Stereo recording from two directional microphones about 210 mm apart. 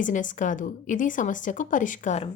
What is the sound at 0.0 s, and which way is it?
Speech, 40° left (ahead or behind).